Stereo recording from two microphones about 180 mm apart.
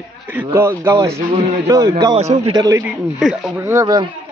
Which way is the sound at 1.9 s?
30° right (ahead or behind).